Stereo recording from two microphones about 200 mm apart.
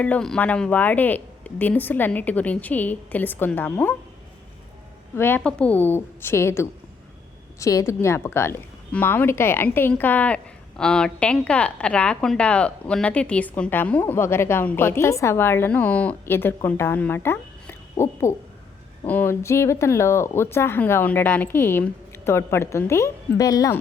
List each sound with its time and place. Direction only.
0.0 s speech: 5° left (ahead or behind)
5.1 s speech: 10° left (ahead or behind)